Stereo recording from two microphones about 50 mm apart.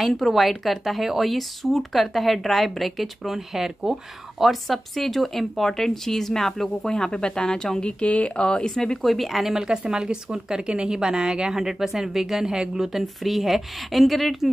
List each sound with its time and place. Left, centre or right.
0.0 s speech: centre
8.0 s speech: left
9.0 s speech: centre